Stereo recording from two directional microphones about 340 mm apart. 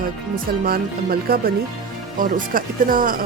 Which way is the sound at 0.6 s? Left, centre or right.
Right.